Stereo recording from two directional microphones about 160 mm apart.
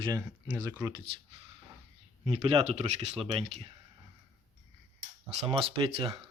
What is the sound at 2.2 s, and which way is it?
Speech, 35° right (ahead or behind).